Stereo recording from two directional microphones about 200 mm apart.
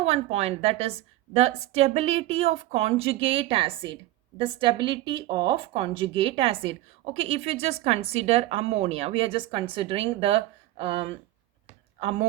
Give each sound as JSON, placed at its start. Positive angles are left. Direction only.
{"t": 0.0, "sound": "a woman's voice", "side_deg": -30}